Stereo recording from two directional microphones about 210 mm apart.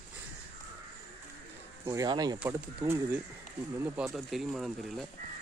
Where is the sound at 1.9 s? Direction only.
15° right (ahead or behind).